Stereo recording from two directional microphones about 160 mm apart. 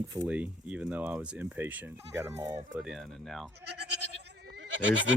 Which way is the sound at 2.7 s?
Centre (ahead or behind).